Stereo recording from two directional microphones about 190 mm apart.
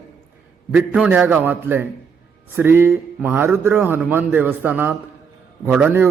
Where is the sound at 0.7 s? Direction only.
5° right (ahead or behind).